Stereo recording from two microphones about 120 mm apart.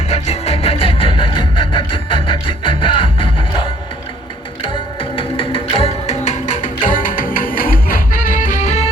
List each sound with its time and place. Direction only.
0.1 s music: 65° left (ahead or behind); by 3.7 s 45° left (ahead or behind)
4.7 s music: 45° left (ahead or behind); by 7.0 s 90° left
8.3 s music: 90° left; by 8.9 s 70° left (ahead or behind)